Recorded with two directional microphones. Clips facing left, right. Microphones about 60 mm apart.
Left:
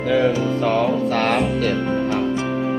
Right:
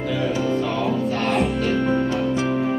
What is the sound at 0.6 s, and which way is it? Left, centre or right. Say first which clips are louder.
Speech: left 4 dB; left.